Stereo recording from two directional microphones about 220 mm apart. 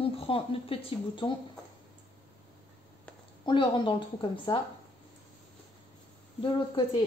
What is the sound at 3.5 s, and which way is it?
Speech, 20° left (ahead or behind).